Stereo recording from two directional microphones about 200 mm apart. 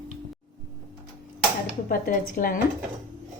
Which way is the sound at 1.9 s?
45° left (ahead or behind).